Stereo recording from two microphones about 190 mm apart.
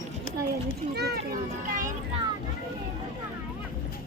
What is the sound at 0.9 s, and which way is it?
Children playing, 55° right (ahead or behind).